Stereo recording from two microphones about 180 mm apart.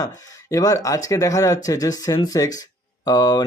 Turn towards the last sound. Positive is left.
turn(degrees=20)  # may be behind; listen again after turning